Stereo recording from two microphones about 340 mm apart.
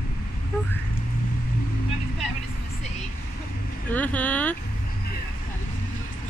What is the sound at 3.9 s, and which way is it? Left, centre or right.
Speech, centre.